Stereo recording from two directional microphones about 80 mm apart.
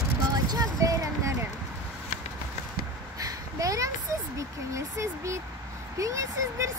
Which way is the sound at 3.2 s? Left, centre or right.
Right.